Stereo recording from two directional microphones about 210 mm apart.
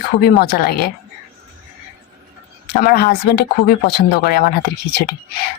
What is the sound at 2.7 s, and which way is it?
Speech, 45° left (ahead or behind).